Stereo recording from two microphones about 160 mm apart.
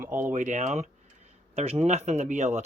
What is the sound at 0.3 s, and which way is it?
Speech, 50° right (ahead or behind).